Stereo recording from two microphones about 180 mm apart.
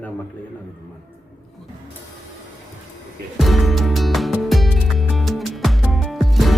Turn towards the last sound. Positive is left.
turn(degrees=0)  # may be behind; listen again after turning